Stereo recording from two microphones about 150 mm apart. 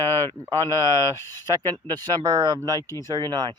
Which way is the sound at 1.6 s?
30° right (ahead or behind).